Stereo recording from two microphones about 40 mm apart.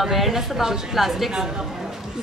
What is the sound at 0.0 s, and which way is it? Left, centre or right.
A woman's voice, centre.